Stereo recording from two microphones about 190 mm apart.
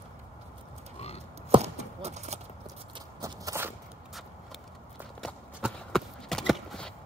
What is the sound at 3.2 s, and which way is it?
Walk, 15° right (ahead or behind).